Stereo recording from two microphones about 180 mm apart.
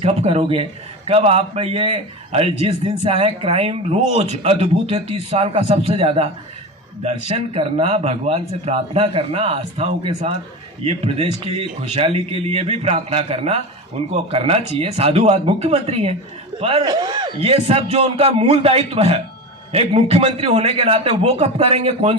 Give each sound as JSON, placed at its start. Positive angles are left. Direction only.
{"t": 0.0, "sound": "a man's voice", "side_deg": -35}